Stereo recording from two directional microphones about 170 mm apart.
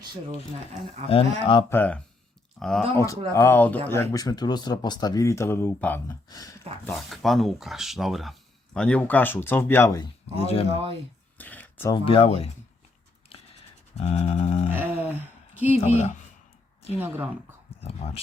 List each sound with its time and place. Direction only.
1.0 s livestock: 30° left (ahead or behind)
1.7 s speech: 10° left (ahead or behind)
3.3 s speech: 15° left (ahead or behind)
6.8 s speech: centre (ahead or behind); by 10.1 s 20° left (ahead or behind)
10.3 s livestock: 35° left (ahead or behind)
11.3 s a sound: 10° left (ahead or behind)
11.9 s livestock: 30° left (ahead or behind)
13.9 s livestock: 40° left (ahead or behind)
14.7 s a sound: 10° right (ahead or behind)
15.8 s livestock: 40° left (ahead or behind)
17.0 s a sound: 10° right (ahead or behind)
17.7 s speech: 35° left (ahead or behind)